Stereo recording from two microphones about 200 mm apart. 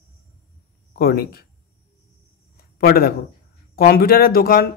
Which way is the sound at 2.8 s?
50° left (ahead or behind).